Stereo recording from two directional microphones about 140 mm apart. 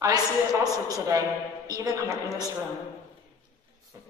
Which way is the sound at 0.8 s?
25° right (ahead or behind).